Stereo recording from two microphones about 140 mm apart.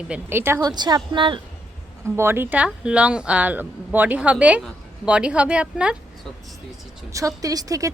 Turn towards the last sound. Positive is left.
turn(degrees=-25)  # may be behind; listen again after turning